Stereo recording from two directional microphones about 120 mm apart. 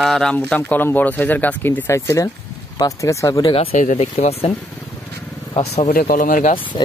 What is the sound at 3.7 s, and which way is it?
Speech, 90° left.